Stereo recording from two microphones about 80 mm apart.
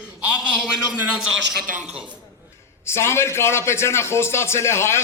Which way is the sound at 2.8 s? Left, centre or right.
Left.